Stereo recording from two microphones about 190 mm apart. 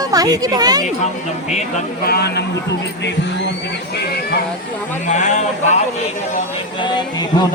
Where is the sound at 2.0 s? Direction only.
55° left (ahead or behind).